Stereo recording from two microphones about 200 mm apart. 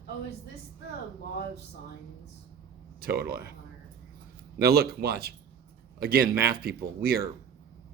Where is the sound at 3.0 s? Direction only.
50° right (ahead or behind).